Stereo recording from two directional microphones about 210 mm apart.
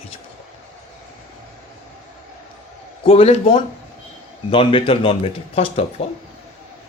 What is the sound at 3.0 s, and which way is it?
Speech, 30° left (ahead or behind).